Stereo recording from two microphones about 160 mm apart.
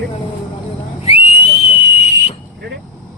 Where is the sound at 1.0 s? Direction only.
40° left (ahead or behind).